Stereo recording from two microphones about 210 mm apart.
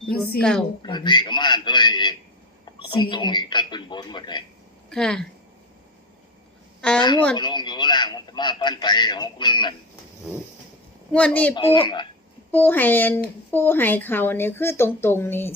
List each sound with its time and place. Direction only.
0.8 s a man's voice: 20° left (ahead or behind)
4.9 s a woman's voice: 5° left (ahead or behind)
7.0 s a man's voice: 20° left (ahead or behind)
11.1 s a woman's voice: 5° left (ahead or behind)
11.5 s a man's voice: 25° left (ahead or behind)
12.5 s speech: 10° left (ahead or behind)